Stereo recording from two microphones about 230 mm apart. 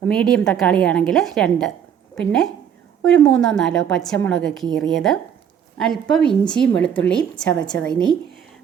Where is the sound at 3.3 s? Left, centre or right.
Centre.